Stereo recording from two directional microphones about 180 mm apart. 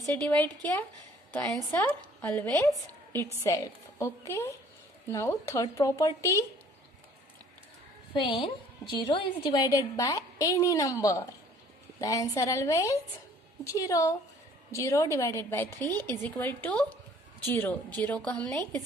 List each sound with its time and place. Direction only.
0.2 s a woman's voice: 5° left (ahead or behind)
8.1 s a woman's voice: 25° left (ahead or behind); by 18.6 s 5° left (ahead or behind)